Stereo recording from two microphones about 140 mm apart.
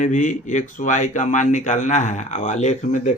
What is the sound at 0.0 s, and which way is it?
A man's voice, 65° left (ahead or behind).